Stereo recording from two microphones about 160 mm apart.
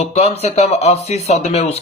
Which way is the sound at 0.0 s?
40° left (ahead or behind).